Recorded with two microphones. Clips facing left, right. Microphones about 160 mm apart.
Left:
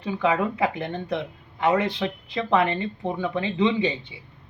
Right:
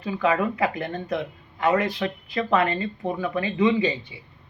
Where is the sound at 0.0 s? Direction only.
20° left (ahead or behind).